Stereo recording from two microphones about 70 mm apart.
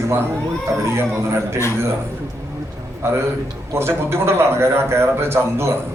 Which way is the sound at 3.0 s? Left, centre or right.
Right.